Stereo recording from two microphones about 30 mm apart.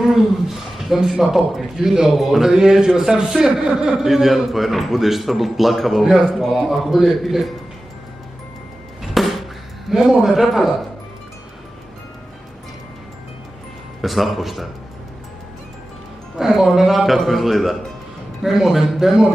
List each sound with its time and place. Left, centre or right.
0.0 s a sound: centre
0.9 s a man's voice: centre
2.5 s a man's voice: right
9.0 s a sound: centre
10.0 s a man's voice: centre
14.0 s a man's voice: centre
16.3 s a man's voice: centre